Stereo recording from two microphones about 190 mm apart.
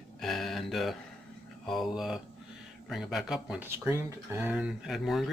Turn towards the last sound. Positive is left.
turn(degrees=0)  # may be behind; listen again after turning